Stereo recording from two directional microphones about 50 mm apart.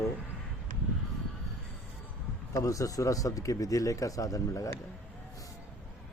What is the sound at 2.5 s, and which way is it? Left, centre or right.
Speech, left.